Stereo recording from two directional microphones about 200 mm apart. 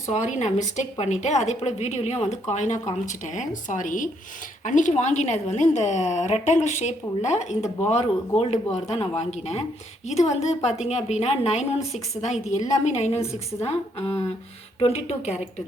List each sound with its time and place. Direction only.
0.1 s a woman's voice: 35° left (ahead or behind)